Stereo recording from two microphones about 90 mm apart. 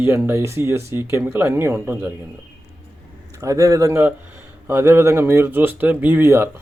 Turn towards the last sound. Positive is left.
turn(degrees=-25)  # may be behind; listen again after turning